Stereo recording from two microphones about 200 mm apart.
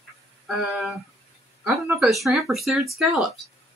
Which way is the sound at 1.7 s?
10° right (ahead or behind).